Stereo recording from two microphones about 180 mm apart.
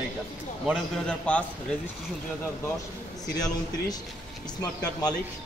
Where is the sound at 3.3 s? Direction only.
20° left (ahead or behind).